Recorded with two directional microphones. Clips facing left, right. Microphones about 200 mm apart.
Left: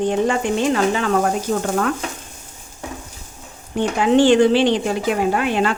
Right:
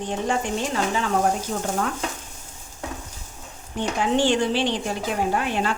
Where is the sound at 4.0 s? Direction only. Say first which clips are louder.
Left 8 dB; 80° left.